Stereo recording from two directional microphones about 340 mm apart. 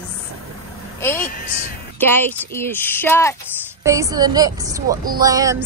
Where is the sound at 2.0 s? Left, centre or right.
Centre.